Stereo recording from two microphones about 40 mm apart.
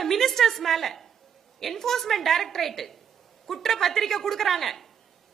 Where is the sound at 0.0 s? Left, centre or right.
Centre.